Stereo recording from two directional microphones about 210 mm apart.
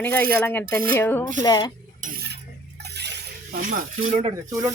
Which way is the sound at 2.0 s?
45° right (ahead or behind).